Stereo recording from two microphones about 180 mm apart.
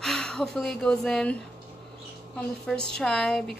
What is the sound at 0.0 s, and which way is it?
A woman's voice, 5° left (ahead or behind).